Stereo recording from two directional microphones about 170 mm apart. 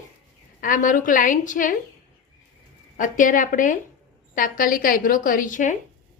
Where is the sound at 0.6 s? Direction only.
50° left (ahead or behind).